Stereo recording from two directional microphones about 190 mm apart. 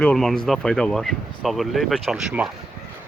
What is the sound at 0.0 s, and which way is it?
Speech, 5° left (ahead or behind).